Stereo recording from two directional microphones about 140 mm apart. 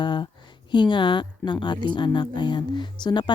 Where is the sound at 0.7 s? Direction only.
35° left (ahead or behind).